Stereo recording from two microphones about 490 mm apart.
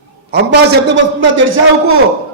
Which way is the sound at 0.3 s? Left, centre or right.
Centre.